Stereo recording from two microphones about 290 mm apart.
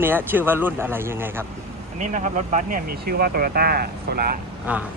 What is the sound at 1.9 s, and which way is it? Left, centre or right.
Speech, right.